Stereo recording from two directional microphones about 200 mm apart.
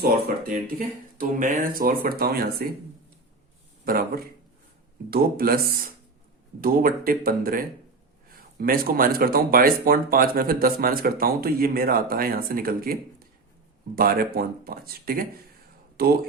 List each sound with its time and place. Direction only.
1.2 s speech: 40° right (ahead or behind)
3.8 s speech: 50° right (ahead or behind)